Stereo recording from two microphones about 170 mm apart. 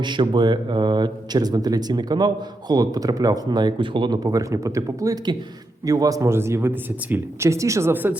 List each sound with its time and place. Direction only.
0.0 s a man's voice: 25° right (ahead or behind); by 8.2 s 10° right (ahead or behind)